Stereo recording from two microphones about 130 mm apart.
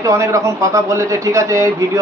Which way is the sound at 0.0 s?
25° right (ahead or behind).